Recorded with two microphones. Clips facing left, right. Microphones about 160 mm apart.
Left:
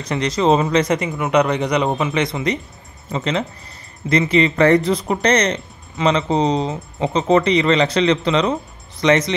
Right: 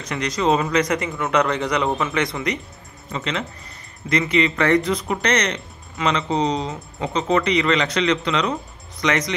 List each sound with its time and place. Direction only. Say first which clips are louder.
0.0 s speech: left 4 dB; 30° left (ahead or behind)